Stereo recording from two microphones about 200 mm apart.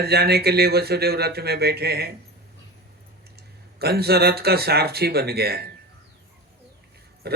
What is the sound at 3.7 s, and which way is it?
A man's voice, 50° right (ahead or behind).